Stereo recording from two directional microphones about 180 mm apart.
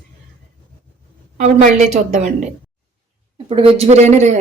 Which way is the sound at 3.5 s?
30° right (ahead or behind).